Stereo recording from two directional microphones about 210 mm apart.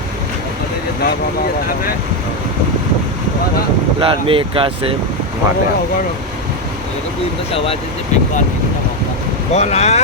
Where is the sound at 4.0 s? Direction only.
25° right (ahead or behind).